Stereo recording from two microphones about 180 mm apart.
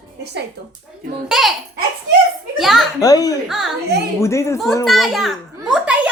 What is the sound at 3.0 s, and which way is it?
Speech, 20° left (ahead or behind).